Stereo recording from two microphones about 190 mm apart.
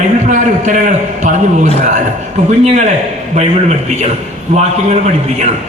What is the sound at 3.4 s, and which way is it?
Speech, 35° right (ahead or behind).